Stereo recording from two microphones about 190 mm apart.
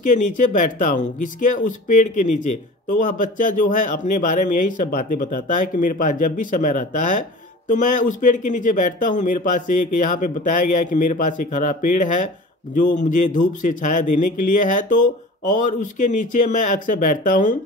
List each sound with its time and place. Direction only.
0.0 s a man's voice: 40° left (ahead or behind)